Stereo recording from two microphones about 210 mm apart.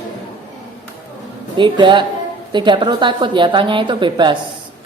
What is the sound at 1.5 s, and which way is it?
A woman's voice, 20° right (ahead or behind).